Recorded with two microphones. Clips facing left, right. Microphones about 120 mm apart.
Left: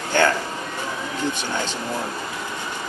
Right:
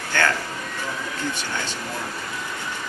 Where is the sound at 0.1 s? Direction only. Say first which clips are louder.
Left 4 dB; 20° left (ahead or behind).